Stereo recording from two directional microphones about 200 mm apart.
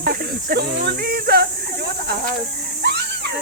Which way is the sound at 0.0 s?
45° right (ahead or behind).